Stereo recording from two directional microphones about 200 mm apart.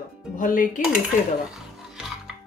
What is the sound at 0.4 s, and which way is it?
Speech, 45° left (ahead or behind).